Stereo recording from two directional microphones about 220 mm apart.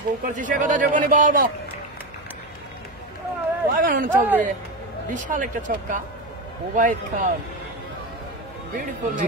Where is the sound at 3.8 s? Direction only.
40° right (ahead or behind).